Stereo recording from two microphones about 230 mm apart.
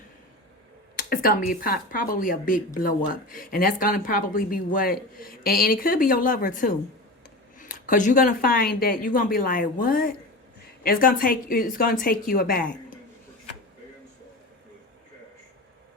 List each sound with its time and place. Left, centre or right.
0.9 s speech: left